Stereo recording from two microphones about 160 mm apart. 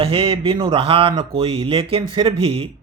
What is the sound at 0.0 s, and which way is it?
Speech, 35° right (ahead or behind).